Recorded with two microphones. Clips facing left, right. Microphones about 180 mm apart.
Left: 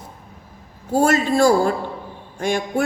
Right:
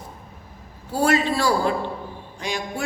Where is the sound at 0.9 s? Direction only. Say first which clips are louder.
Left 3 dB; 45° left (ahead or behind).